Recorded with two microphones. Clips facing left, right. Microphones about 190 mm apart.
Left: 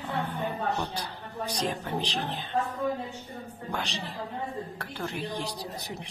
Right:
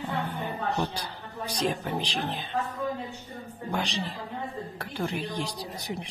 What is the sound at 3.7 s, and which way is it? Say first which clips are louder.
A woman's voice: right 4 dB; 15° right (ahead or behind).